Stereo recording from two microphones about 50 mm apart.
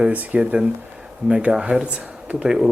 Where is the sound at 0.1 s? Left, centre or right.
Right.